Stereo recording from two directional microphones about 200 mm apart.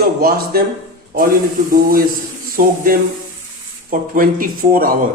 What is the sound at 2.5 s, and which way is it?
A man's voice, 45° right (ahead or behind).